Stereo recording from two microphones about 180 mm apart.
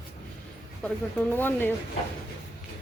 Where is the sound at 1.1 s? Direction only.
10° left (ahead or behind).